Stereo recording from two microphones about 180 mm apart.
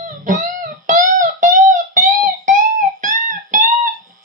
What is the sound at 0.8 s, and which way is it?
Music, 45° right (ahead or behind).